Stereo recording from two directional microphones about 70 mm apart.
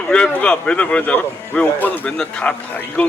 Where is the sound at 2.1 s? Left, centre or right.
Centre.